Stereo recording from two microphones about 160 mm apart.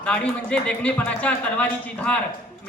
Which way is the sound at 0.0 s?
5° left (ahead or behind).